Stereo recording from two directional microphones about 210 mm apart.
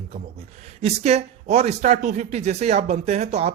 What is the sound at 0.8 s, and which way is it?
Speech, 30° right (ahead or behind).